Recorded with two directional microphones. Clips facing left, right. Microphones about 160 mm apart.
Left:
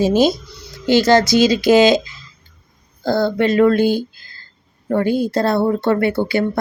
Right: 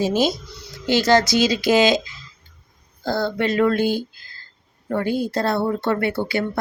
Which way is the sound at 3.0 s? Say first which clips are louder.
Left 5 dB; 50° left (ahead or behind).